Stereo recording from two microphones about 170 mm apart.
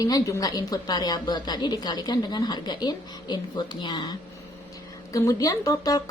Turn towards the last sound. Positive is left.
turn(degrees=20)  # may be behind; listen again after turning